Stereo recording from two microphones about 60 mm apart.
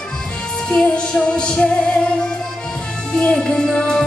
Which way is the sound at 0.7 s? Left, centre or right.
Centre.